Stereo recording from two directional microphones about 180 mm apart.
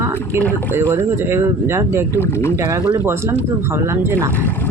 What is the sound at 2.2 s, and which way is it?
Speech, 15° left (ahead or behind).